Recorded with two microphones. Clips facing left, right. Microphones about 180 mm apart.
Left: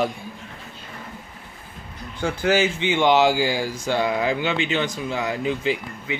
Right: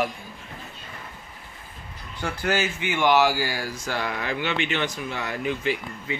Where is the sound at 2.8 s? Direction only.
25° left (ahead or behind).